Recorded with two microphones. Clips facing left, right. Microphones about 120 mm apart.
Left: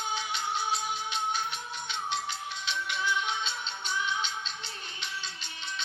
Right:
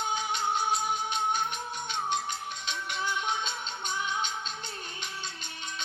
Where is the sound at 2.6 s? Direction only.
45° right (ahead or behind).